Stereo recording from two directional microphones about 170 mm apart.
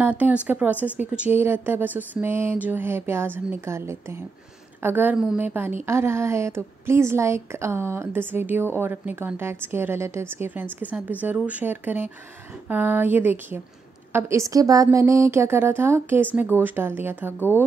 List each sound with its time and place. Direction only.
0.0 s a woman's voice: 10° right (ahead or behind)